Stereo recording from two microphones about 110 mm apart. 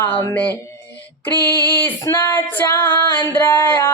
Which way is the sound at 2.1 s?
25° left (ahead or behind).